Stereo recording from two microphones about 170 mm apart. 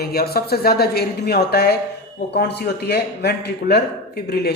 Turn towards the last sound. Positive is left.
turn(degrees=70)  # may be behind; listen again after turning